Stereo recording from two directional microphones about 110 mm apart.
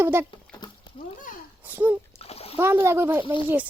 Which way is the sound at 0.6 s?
40° left (ahead or behind).